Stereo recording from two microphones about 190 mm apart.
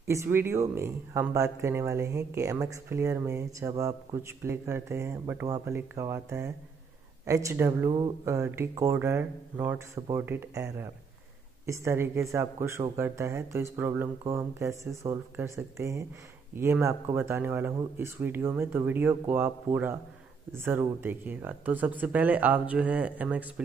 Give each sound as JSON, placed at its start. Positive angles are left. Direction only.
{"t": 0.1, "sound": "speech", "side_deg": -15}